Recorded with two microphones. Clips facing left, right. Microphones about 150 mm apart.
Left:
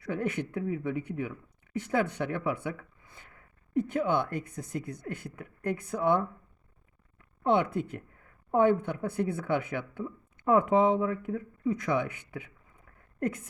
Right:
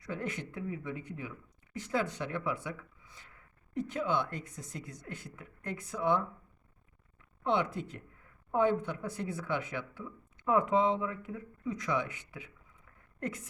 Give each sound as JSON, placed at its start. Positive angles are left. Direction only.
{"t": 0.0, "sound": "speech", "side_deg": 60}
{"t": 7.4, "sound": "speech", "side_deg": 55}